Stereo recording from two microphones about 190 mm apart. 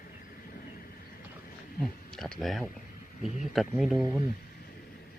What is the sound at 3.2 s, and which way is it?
Speech, 40° left (ahead or behind).